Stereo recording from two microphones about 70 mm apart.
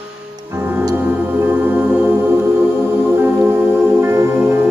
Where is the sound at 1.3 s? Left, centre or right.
Right.